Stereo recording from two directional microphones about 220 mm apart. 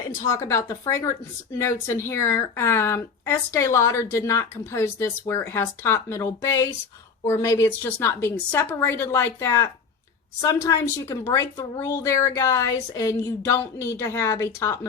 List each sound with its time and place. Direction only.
0.3 s a woman's voice: 15° left (ahead or behind)